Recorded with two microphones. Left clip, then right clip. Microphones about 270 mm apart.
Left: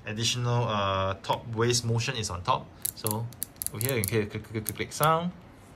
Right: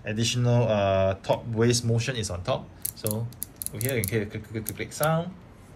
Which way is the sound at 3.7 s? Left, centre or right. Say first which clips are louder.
Right 1 dB; centre.